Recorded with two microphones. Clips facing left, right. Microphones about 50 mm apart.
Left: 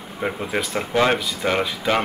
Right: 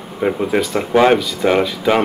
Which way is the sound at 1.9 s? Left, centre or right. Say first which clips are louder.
Right 5 dB; right.